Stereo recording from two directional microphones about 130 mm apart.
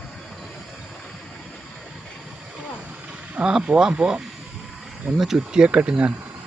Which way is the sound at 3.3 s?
5° right (ahead or behind).